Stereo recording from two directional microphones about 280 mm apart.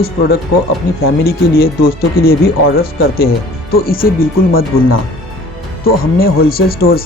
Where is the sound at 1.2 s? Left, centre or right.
Left.